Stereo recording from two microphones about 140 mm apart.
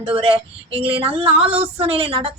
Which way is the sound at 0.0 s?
40° right (ahead or behind).